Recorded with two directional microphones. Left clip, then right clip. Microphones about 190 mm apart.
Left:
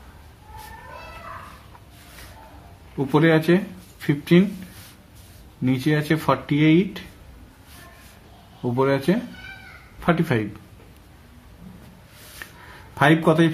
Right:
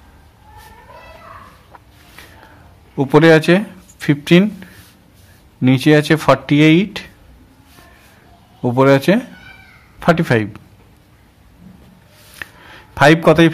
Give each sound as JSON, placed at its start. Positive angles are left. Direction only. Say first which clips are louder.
{"t": 3.0, "sound": "speech", "louder": "right 9 dB", "side_deg": -50}
{"t": 5.6, "sound": "speech", "louder": "right 11 dB", "side_deg": -50}
{"t": 8.6, "sound": "speech", "louder": "right 9 dB", "side_deg": -55}
{"t": 12.4, "sound": "a sound", "louder": "right 9 dB", "side_deg": -50}
{"t": 12.9, "sound": "speech", "louder": "right 8 dB", "side_deg": -45}